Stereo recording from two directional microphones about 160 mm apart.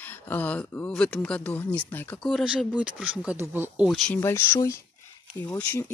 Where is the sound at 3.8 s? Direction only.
Centre (ahead or behind).